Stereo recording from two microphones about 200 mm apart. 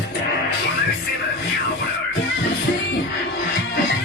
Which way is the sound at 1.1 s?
50° left (ahead or behind).